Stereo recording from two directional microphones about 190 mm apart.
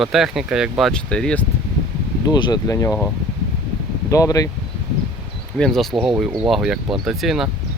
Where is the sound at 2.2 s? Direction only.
20° left (ahead or behind).